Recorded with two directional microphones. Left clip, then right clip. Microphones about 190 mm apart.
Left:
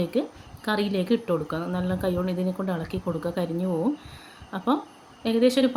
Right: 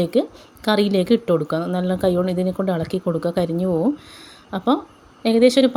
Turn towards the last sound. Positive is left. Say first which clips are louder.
# right 7 dB
turn(degrees=-35)  # may be behind; listen again after turning